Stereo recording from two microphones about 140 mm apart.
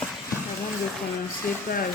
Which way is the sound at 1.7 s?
90° left.